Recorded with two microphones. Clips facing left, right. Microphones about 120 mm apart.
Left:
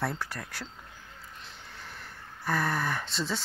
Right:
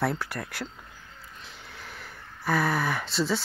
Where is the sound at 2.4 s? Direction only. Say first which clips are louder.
Right 4 dB; 75° right (ahead or behind).